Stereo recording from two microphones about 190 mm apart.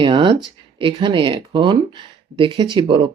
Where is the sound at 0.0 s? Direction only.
25° right (ahead or behind).